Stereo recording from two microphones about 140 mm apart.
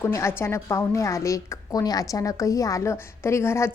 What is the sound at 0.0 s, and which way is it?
A woman's voice, 20° left (ahead or behind).